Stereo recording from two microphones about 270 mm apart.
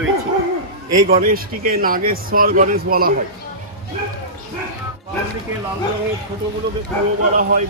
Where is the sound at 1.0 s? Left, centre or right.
Right.